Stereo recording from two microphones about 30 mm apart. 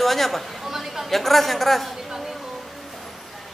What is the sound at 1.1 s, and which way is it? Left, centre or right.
Speech, centre.